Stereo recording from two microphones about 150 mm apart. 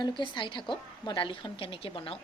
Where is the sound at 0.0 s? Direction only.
35° left (ahead or behind).